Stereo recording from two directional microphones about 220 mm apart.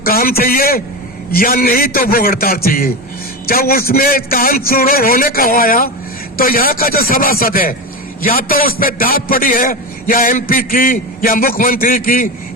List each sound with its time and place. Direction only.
0.0 s a man's voice: 40° left (ahead or behind)